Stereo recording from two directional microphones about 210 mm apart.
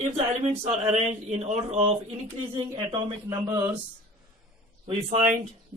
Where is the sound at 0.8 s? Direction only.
30° right (ahead or behind).